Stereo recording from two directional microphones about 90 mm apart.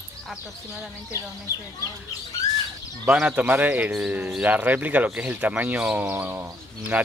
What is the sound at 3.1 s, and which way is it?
Speech, 15° right (ahead or behind).